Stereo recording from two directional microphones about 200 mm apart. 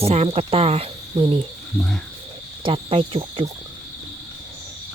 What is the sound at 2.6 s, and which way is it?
Speech, 25° right (ahead or behind).